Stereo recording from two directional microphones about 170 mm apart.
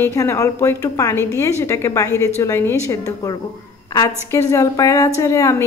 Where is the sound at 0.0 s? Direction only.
15° left (ahead or behind).